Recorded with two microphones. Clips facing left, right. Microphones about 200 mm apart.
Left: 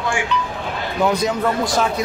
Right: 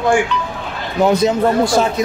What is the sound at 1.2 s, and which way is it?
Speech, 25° right (ahead or behind).